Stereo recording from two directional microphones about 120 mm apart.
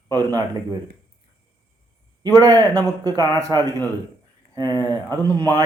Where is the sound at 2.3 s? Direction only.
30° right (ahead or behind).